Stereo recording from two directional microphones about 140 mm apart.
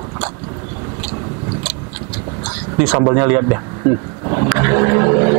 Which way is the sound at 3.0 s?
20° right (ahead or behind).